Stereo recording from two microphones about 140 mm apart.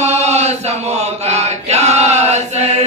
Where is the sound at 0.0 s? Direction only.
50° right (ahead or behind).